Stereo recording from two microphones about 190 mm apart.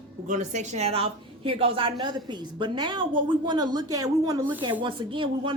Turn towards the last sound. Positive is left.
turn(degrees=-25)  # may be behind; listen again after turning